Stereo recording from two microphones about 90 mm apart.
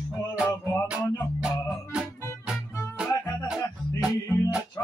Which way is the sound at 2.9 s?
10° right (ahead or behind).